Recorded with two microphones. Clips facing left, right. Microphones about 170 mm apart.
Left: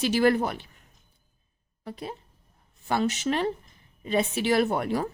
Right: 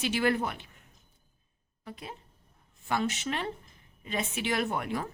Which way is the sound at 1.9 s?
35° left (ahead or behind).